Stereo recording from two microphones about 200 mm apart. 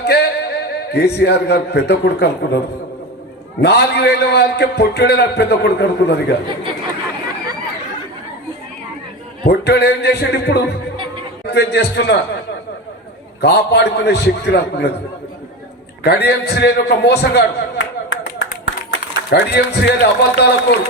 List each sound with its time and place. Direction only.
0.0 s music: 55° left (ahead or behind)
0.9 s a man's voice: 55° left (ahead or behind)
3.6 s a man's voice: 55° left (ahead or behind)
9.5 s a man's voice: 55° left (ahead or behind)
13.4 s a man's voice: 55° left (ahead or behind)
16.0 s a man's voice: 55° left (ahead or behind)